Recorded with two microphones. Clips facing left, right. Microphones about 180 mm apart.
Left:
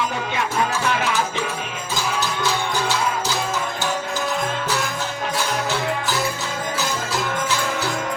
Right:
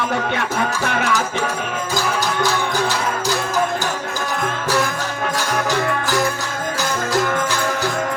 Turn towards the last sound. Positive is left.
turn(degrees=-55)  # may be behind; listen again after turning